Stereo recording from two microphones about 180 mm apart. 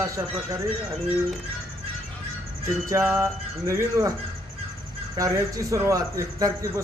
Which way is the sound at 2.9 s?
10° right (ahead or behind).